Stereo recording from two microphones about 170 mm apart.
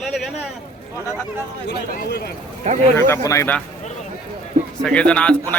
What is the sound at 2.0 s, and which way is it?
Speech, 65° left (ahead or behind).